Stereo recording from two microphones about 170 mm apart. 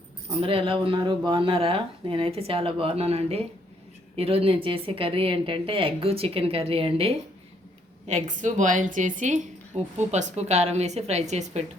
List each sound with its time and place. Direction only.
0.3 s a woman's voice: 35° right (ahead or behind)